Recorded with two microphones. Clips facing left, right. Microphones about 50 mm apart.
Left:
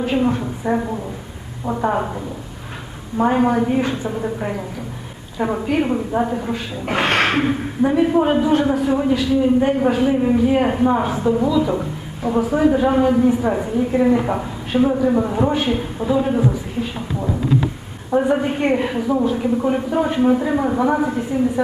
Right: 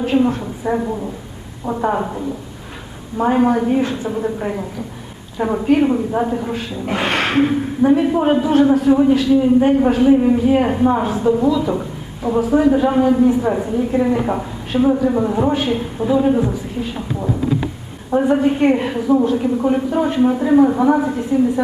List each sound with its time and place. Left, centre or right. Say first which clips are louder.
0.0 s a man's voice: right 2 dB; centre
6.8 s speech: left 1 dB; left
7.3 s a man's voice: right 3 dB; centre